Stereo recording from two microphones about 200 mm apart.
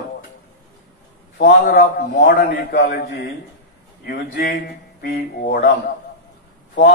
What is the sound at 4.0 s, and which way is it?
A man's voice, 45° left (ahead or behind).